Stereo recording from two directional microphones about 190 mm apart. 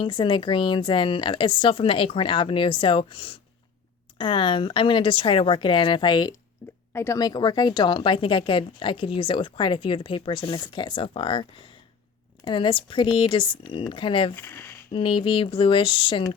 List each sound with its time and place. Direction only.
0.0 s speech: 25° left (ahead or behind)
6.6 s a sound: 10° left (ahead or behind)
6.9 s speech: 15° left (ahead or behind)
12.5 s speech: 25° left (ahead or behind)
14.3 s speech: 10° left (ahead or behind)
14.9 s speech: 25° left (ahead or behind)